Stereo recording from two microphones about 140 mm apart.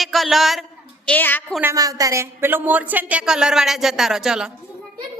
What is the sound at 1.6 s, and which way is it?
A woman's voice, 20° right (ahead or behind).